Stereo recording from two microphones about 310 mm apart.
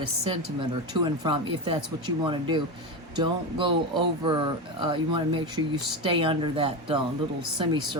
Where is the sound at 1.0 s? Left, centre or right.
Centre.